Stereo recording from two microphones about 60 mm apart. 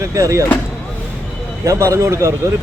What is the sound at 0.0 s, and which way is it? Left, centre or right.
Speech, right.